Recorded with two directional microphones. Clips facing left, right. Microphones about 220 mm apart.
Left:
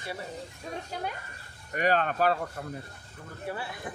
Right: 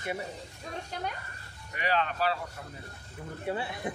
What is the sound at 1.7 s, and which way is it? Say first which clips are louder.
Speech: left 4 dB; 45° left (ahead or behind).